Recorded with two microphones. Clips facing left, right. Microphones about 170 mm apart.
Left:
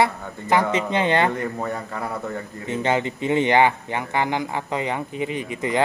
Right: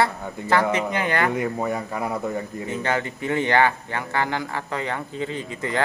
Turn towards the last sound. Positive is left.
turn(degrees=15)  # may be behind; listen again after turning